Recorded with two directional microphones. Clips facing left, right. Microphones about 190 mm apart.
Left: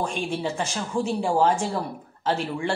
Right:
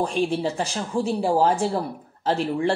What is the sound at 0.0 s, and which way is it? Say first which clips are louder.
Speech: right 4 dB; 35° right (ahead or behind).